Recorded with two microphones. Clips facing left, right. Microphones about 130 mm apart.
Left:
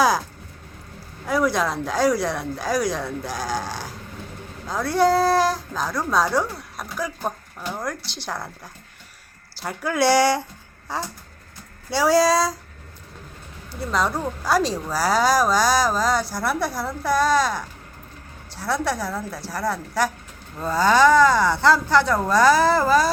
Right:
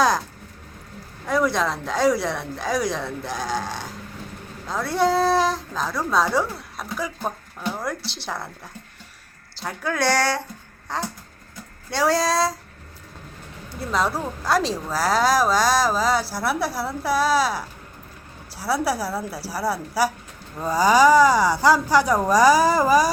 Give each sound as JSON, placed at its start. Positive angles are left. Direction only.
{"t": 1.3, "sound": "a woman's voice", "side_deg": 0}
{"t": 13.7, "sound": "a woman's voice", "side_deg": 0}